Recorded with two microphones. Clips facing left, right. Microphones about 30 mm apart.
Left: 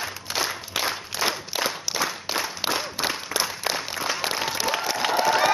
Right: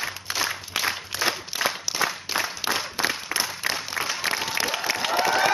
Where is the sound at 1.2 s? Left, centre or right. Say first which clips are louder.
Even; centre.